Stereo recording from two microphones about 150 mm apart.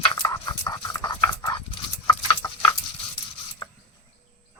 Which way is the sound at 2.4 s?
25° left (ahead or behind).